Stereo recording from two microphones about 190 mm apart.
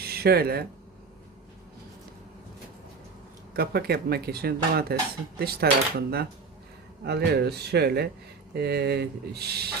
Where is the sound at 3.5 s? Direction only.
55° right (ahead or behind).